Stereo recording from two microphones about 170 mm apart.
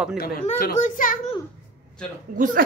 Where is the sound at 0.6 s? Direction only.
50° left (ahead or behind).